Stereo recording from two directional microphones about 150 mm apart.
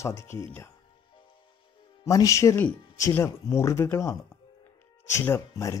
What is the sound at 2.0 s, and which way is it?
Speech, 20° left (ahead or behind).